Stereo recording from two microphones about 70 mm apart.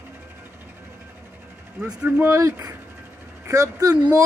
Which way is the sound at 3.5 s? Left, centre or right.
Right.